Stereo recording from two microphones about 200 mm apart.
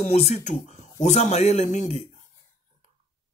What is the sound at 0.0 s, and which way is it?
A man's voice, 35° left (ahead or behind).